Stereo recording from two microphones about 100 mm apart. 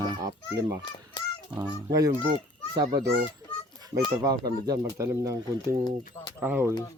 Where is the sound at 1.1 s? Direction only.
50° left (ahead or behind).